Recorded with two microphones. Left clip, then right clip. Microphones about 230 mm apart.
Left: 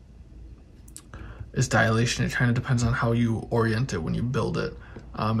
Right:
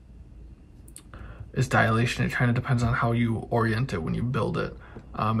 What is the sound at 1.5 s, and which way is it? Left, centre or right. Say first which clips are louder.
Speech: even; centre.